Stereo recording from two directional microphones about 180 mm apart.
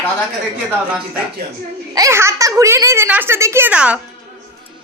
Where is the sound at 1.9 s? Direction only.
15° right (ahead or behind).